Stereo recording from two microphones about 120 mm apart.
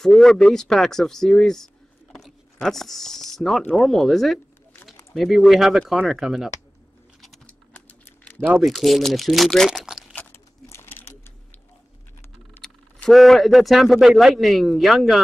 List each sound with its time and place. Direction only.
0.0 s speech: 5° left (ahead or behind)
7.2 s typing: 5° left (ahead or behind)
8.4 s speech: 15° right (ahead or behind)
8.6 s speech: centre (ahead or behind)
10.1 s a sound: 20° left (ahead or behind)
12.6 s speech: centre (ahead or behind)